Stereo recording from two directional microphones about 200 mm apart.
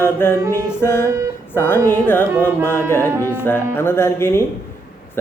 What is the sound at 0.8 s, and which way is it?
Speech, 10° left (ahead or behind).